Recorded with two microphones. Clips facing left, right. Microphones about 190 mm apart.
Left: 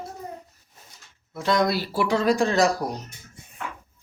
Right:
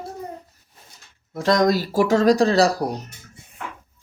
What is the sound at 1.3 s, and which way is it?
Speech, 40° right (ahead or behind).